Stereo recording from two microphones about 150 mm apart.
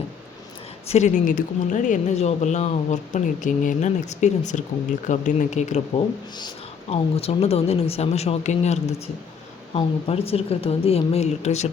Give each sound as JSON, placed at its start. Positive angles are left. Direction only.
{"t": 0.9, "sound": "a woman's voice", "side_deg": 50}